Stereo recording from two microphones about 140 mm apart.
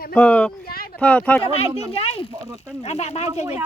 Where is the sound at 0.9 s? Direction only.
10° left (ahead or behind).